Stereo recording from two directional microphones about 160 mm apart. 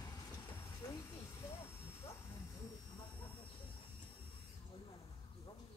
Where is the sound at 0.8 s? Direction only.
20° left (ahead or behind).